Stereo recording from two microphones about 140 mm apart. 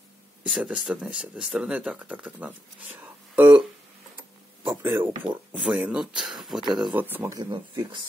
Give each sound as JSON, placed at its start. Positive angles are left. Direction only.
{"t": 0.4, "sound": "speech", "side_deg": -5}
{"t": 4.6, "sound": "speech", "side_deg": -15}
{"t": 7.0, "sound": "speech", "side_deg": -15}
{"t": 7.3, "sound": "speech", "side_deg": -35}